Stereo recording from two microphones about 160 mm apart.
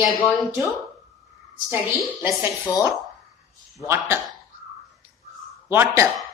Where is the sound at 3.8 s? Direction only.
15° right (ahead or behind).